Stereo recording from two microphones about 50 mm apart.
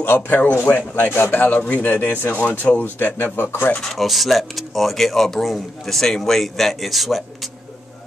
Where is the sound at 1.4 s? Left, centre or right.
Left.